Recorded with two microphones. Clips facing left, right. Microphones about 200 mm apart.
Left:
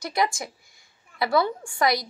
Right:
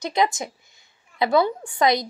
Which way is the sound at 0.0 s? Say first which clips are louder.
Right 3 dB; 20° right (ahead or behind).